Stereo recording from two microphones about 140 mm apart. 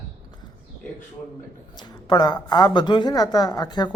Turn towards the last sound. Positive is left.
turn(degrees=30)  # may be behind; listen again after turning